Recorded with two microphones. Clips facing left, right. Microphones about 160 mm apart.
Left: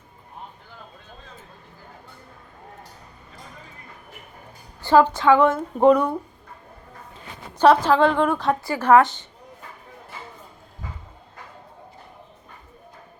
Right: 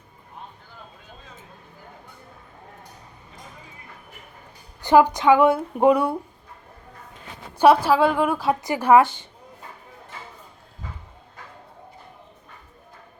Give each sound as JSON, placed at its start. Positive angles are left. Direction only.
{"t": 4.8, "sound": "a woman's voice", "side_deg": -15}
{"t": 7.6, "sound": "a woman's voice", "side_deg": -10}